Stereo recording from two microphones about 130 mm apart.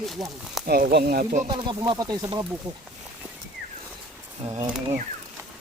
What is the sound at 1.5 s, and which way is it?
Speech, 35° right (ahead or behind).